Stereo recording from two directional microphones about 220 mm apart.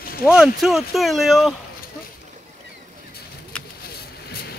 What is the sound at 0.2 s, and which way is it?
Speech, centre (ahead or behind).